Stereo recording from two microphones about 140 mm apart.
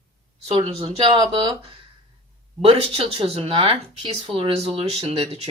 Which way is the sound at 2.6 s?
45° right (ahead or behind).